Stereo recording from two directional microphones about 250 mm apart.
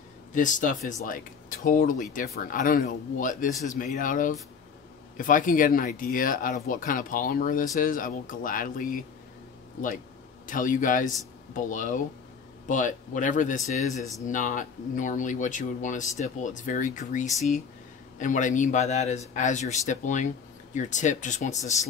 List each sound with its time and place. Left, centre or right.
0.3 s speech: left
10.4 s speech: left